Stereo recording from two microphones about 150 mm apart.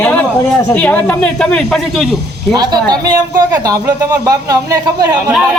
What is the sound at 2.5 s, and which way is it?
Speech, 25° right (ahead or behind).